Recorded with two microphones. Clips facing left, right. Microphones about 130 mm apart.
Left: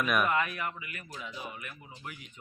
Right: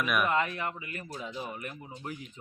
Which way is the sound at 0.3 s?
25° right (ahead or behind).